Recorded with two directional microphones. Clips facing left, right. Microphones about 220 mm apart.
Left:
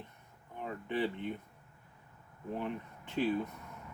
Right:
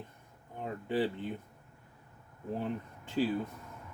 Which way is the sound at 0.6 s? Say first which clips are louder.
Right 3 dB; 35° right (ahead or behind).